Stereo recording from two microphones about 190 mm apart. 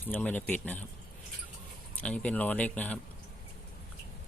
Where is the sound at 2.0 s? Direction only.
5° left (ahead or behind).